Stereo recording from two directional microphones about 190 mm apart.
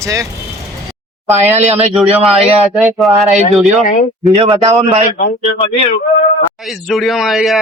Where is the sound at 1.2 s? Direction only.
10° right (ahead or behind).